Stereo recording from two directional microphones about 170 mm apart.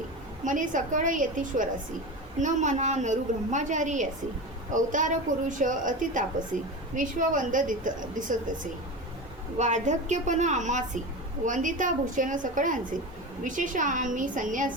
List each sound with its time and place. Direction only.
0.4 s a woman's voice: 50° right (ahead or behind)
9.6 s a woman's voice: 45° right (ahead or behind)